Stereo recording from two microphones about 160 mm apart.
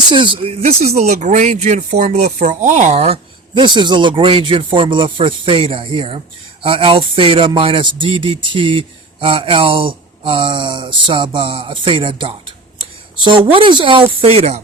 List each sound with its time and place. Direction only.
0.1 s speech: 30° right (ahead or behind)